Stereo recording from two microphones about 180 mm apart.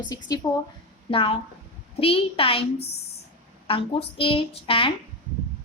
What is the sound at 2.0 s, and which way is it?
Speech, 30° left (ahead or behind).